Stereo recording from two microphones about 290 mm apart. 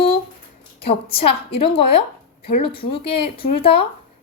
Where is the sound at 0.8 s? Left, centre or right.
Centre.